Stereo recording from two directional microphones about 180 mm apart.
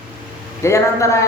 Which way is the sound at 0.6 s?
15° left (ahead or behind).